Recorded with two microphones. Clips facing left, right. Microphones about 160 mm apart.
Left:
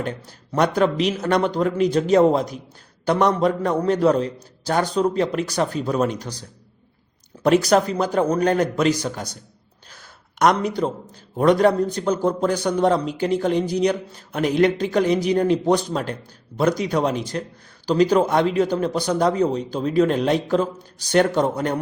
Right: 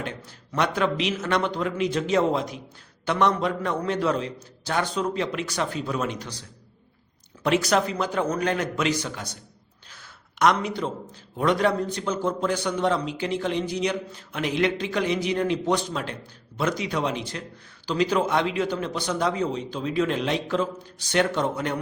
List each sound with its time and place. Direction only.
0.0 s a man's voice: 40° left (ahead or behind)
7.4 s a man's voice: 40° left (ahead or behind)